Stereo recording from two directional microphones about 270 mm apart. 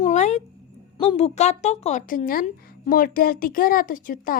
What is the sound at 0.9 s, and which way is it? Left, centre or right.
A woman's voice, left.